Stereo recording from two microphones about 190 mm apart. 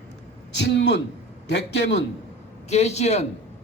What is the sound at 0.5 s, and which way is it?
A man's voice, 70° left (ahead or behind).